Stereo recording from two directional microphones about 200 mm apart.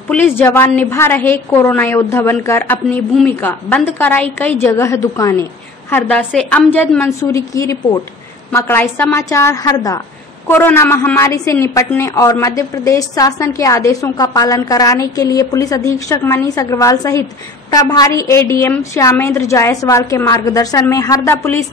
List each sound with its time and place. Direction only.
0.1 s a woman's voice: 10° left (ahead or behind)